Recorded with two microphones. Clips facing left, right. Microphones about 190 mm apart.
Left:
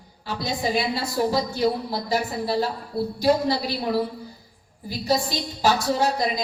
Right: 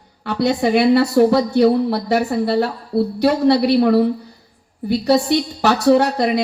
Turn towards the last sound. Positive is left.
turn(degrees=-65)  # may be behind; listen again after turning